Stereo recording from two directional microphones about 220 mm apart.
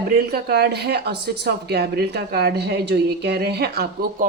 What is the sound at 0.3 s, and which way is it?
Speech, 45° right (ahead or behind).